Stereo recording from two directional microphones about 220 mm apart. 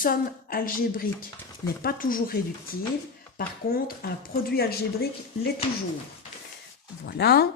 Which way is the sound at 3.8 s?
45° left (ahead or behind).